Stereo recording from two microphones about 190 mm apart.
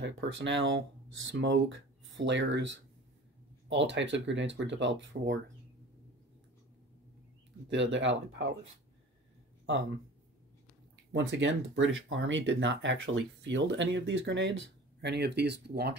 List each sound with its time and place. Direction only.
0.0 s speech: 75° right (ahead or behind)
7.7 s speech: 70° right (ahead or behind)
11.1 s speech: 75° right (ahead or behind)